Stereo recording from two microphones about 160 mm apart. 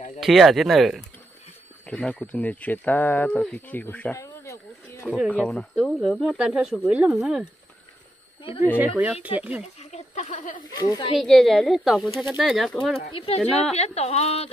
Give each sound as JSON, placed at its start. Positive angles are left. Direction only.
{"t": 0.2, "sound": "speech", "side_deg": 0}
{"t": 5.3, "sound": "speech", "side_deg": 5}
{"t": 8.7, "sound": "speech", "side_deg": -10}
{"t": 9.8, "sound": "a sound", "side_deg": 40}
{"t": 10.7, "sound": "speech", "side_deg": 25}
{"t": 11.1, "sound": "speech", "side_deg": 0}
{"t": 13.1, "sound": "speech", "side_deg": 35}